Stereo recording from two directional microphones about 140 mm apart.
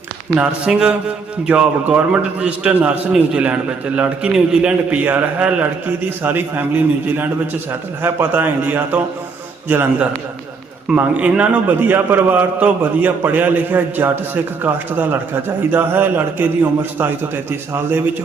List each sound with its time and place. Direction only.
0.3 s a man's voice: 5° right (ahead or behind)